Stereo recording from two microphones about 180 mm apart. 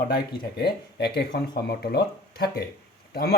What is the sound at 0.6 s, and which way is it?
Speech, 65° left (ahead or behind).